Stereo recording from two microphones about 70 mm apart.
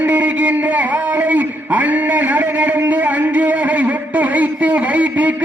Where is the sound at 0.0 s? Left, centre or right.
Right.